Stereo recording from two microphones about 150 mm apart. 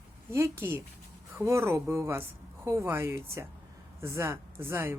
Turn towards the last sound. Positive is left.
turn(degrees=-15)  # may be behind; listen again after turning